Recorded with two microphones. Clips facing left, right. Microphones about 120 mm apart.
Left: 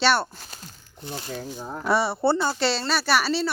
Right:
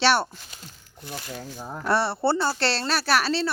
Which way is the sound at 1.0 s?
25° left (ahead or behind).